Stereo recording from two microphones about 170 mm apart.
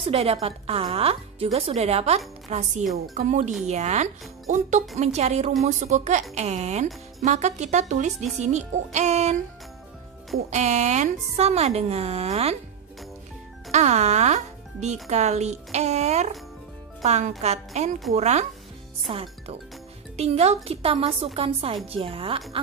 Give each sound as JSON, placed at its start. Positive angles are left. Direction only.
{"t": 0.0, "sound": "a woman's voice", "side_deg": -35}
{"t": 10.5, "sound": "a woman's voice", "side_deg": -40}
{"t": 13.7, "sound": "a woman's voice", "side_deg": -40}